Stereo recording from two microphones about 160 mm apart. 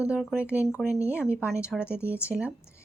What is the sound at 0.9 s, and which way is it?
Speech, 15° left (ahead or behind).